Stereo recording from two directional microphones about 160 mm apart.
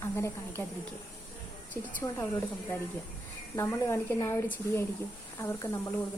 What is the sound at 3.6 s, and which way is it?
Speech, 15° left (ahead or behind).